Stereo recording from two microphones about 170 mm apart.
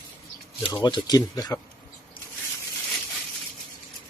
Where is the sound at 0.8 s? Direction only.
25° left (ahead or behind).